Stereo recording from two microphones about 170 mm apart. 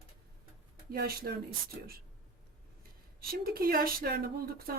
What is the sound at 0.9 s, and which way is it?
Speech, 65° right (ahead or behind).